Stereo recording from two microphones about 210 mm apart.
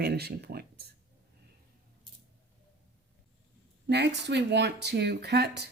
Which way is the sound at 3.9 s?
55° right (ahead or behind).